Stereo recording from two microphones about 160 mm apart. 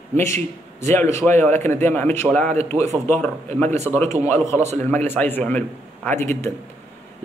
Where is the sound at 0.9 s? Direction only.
15° left (ahead or behind).